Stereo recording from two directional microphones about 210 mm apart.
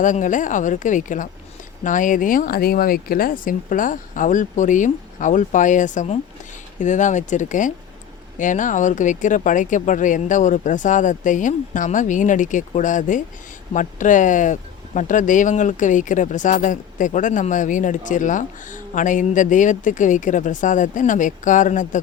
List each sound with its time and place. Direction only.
0.0 s speech: 35° left (ahead or behind)